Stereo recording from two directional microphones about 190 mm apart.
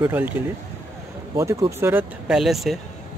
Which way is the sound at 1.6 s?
15° right (ahead or behind).